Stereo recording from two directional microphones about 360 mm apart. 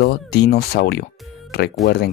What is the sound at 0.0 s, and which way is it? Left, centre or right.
Speech, left.